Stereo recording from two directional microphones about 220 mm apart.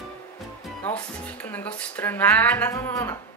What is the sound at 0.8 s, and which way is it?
Speech, 5° left (ahead or behind).